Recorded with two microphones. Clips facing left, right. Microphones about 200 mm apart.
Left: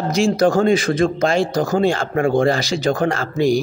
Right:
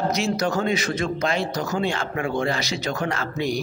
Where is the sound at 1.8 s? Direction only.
35° left (ahead or behind).